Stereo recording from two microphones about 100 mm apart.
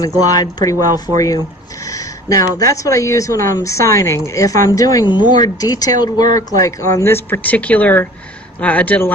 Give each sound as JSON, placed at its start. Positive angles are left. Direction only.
{"t": 0.3, "sound": "a woman's voice", "side_deg": 40}